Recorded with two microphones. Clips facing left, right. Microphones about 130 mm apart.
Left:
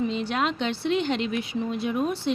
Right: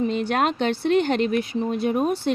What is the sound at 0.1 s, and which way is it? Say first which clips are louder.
Speech: right 4 dB; 55° right (ahead or behind).